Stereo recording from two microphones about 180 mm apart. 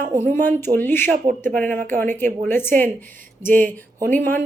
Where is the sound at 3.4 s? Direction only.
45° right (ahead or behind).